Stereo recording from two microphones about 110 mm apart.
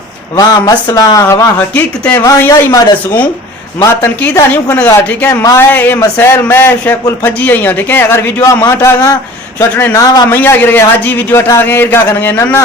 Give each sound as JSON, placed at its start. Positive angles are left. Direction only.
{"t": 0.3, "sound": "speech", "side_deg": 35}
{"t": 1.5, "sound": "speech", "side_deg": 15}
{"t": 2.5, "sound": "a man's voice", "side_deg": 30}
{"t": 4.7, "sound": "a man's voice", "side_deg": 20}
{"t": 5.3, "sound": "a man's voice", "side_deg": 30}
{"t": 5.7, "sound": "a man's voice", "side_deg": 15}
{"t": 10.3, "sound": "a man's voice", "side_deg": 20}